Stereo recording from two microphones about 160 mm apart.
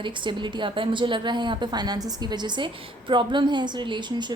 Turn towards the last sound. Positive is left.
turn(degrees=-30)  # may be behind; listen again after turning